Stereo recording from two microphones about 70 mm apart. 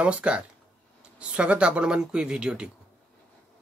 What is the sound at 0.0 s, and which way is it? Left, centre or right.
Speech, centre.